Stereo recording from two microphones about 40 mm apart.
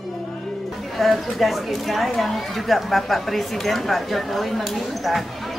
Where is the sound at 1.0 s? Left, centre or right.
Centre.